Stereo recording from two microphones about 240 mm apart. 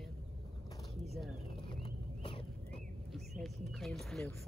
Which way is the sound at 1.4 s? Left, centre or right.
Left.